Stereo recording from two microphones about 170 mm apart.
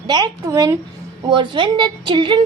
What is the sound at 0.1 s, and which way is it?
A woman's voice, 20° right (ahead or behind).